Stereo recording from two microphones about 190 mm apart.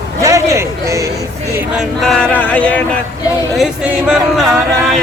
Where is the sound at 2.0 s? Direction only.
5° left (ahead or behind).